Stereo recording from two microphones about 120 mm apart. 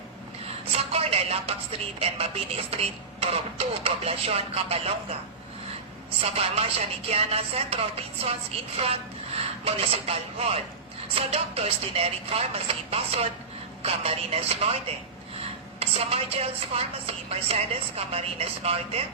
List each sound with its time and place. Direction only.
0.9 s a sound: 55° right (ahead or behind)
2.0 s music: 55° right (ahead or behind)
6.3 s music: 55° right (ahead or behind)